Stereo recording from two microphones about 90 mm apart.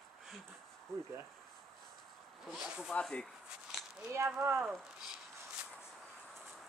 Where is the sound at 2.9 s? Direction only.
10° left (ahead or behind).